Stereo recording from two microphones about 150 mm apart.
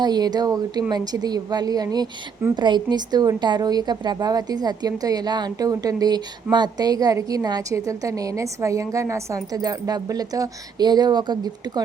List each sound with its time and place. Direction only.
0.0 s a woman's voice: 25° right (ahead or behind)